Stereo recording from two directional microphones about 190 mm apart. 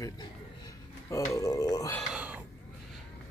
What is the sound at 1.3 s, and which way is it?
Speech, 15° left (ahead or behind).